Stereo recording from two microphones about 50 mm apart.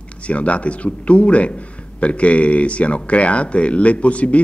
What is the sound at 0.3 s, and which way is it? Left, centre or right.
Speech, left.